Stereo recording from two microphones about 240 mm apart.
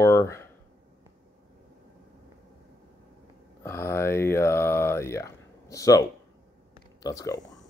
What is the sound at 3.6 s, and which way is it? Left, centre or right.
Speech, centre.